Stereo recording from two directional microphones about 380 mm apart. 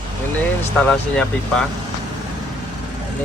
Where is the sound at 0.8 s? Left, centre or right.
Centre.